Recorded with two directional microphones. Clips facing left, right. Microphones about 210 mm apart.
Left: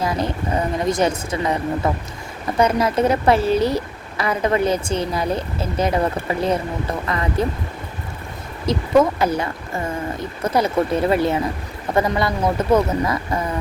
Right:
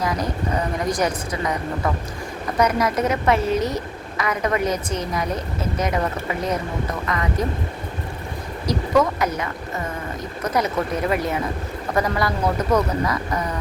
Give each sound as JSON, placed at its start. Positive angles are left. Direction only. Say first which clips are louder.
{"t": 0.0, "sound": "a sound", "louder": "left 2 dB", "side_deg": 25}
{"t": 0.9, "sound": "a woman's voice", "louder": "left 3 dB", "side_deg": 25}
{"t": 8.6, "sound": "speech", "louder": "left 3 dB", "side_deg": 25}